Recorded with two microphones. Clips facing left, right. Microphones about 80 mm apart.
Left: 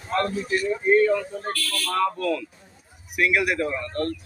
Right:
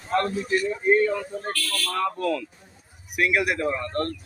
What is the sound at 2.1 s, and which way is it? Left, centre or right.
Speech, right.